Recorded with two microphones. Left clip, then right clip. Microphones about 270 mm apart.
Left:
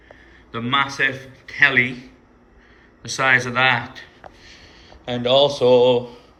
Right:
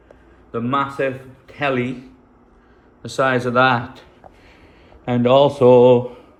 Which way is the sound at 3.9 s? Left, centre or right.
Centre.